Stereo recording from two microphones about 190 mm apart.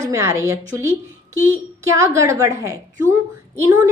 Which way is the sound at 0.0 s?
15° right (ahead or behind).